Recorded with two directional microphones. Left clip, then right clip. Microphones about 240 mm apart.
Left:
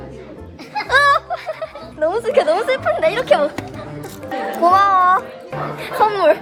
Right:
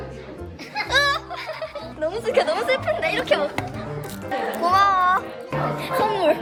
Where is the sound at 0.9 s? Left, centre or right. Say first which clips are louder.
Left 7 dB; centre.